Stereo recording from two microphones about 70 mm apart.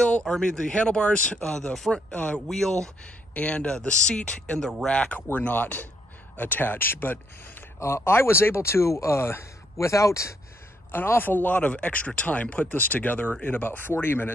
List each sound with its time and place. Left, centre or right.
0.0 s a sound: centre
0.4 s speech: centre; by 10.3 s left
10.9 s speech: left